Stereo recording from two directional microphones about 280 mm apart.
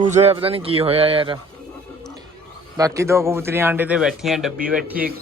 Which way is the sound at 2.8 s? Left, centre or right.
Centre.